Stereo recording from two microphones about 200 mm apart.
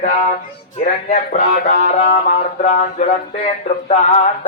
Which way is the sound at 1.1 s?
40° left (ahead or behind).